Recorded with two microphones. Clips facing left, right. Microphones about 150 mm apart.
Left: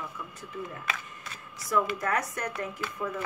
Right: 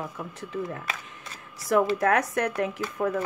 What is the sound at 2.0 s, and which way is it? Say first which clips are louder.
Speech: right 7 dB; 70° right (ahead or behind).